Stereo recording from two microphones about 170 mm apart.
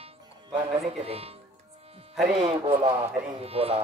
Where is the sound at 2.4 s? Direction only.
35° right (ahead or behind).